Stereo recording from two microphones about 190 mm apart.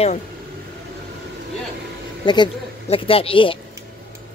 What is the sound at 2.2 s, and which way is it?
Speech, 25° left (ahead or behind).